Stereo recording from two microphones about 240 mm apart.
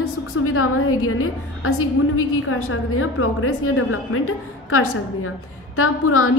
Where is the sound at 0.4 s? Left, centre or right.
Left.